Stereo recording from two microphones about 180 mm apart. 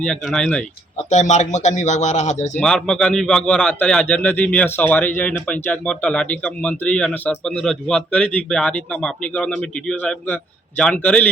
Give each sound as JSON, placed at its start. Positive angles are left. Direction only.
{"t": 0.0, "sound": "a man's voice", "side_deg": 5}
{"t": 1.1, "sound": "speech", "side_deg": 40}
{"t": 2.6, "sound": "a man's voice", "side_deg": 5}